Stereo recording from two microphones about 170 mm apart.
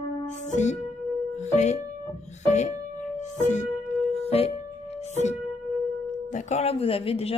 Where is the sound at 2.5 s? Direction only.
45° left (ahead or behind).